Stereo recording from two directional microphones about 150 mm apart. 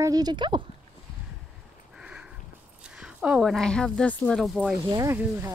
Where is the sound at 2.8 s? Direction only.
5° right (ahead or behind).